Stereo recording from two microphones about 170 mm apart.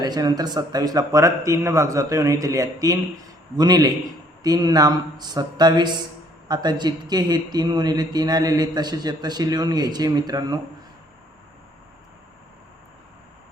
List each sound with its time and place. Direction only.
0.0 s speech: 25° right (ahead or behind)